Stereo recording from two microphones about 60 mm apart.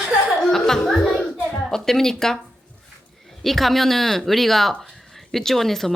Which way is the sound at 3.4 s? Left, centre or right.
Centre.